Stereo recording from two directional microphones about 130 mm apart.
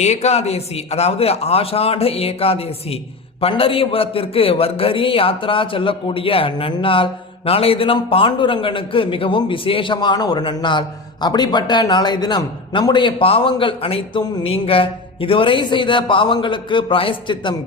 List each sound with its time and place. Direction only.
0.0 s a man's voice: 60° left (ahead or behind); by 17.5 s 40° left (ahead or behind)